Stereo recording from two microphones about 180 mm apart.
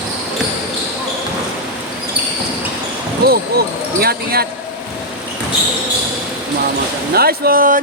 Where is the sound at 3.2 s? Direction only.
60° right (ahead or behind).